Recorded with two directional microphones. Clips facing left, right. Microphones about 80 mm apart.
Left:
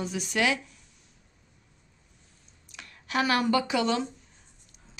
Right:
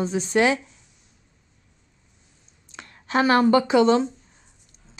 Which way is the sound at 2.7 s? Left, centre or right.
Right.